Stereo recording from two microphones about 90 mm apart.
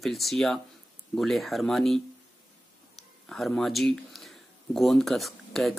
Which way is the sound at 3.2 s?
5° left (ahead or behind).